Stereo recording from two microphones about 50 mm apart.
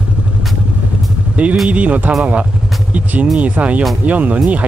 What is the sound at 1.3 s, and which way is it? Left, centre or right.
Speech, right.